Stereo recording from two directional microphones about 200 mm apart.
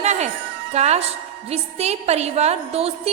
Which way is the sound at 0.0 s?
35° right (ahead or behind).